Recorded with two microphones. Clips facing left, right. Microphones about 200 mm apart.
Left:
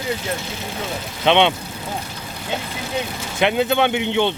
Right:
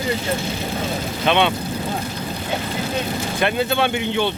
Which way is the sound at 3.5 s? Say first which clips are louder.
Left 3 dB; 15° left (ahead or behind).